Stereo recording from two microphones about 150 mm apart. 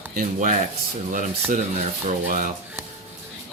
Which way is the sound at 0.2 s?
60° right (ahead or behind).